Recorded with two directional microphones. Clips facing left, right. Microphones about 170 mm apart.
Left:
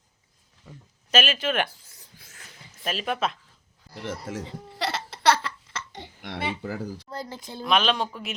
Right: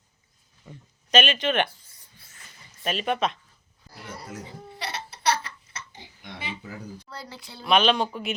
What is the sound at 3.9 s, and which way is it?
Hiccup, 85° left.